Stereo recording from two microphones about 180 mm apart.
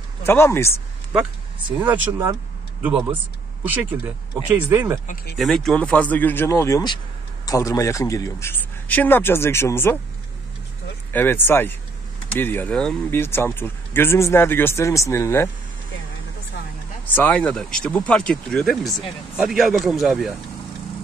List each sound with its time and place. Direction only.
0.2 s speech: 15° left (ahead or behind)
1.7 s speech: 10° right (ahead or behind)
4.6 s speech: 15° right (ahead or behind)
5.0 s speech: 50° left (ahead or behind)
5.4 s speech: centre (ahead or behind)
11.1 s speech: 10° left (ahead or behind)
17.1 s speech: 10° left (ahead or behind)